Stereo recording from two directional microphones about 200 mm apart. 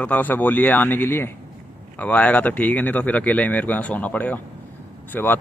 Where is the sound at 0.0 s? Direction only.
10° left (ahead or behind).